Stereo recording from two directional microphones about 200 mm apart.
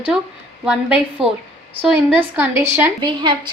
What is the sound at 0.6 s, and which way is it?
A woman's voice, 5° right (ahead or behind).